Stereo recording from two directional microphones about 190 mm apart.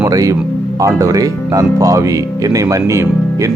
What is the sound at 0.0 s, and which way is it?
Speech, 15° right (ahead or behind).